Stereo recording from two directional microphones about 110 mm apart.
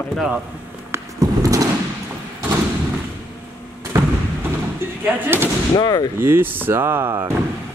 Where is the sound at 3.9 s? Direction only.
30° right (ahead or behind).